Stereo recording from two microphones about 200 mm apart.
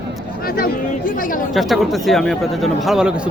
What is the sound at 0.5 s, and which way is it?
Speech, 45° left (ahead or behind).